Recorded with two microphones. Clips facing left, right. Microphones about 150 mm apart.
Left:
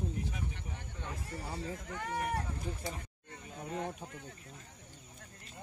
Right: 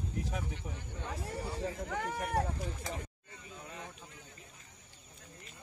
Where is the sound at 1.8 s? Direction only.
65° right (ahead or behind); by 2.9 s 90° right.